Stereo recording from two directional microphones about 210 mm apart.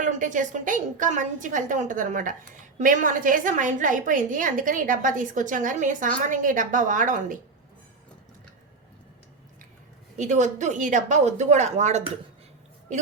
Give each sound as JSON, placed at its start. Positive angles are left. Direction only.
{"t": 0.0, "sound": "a woman's voice", "side_deg": -35}
{"t": 10.2, "sound": "a woman's voice", "side_deg": -35}